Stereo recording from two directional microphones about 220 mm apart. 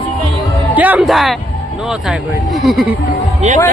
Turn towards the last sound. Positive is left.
turn(degrees=-30)  # may be behind; listen again after turning